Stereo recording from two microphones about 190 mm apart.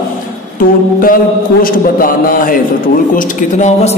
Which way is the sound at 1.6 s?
50° left (ahead or behind).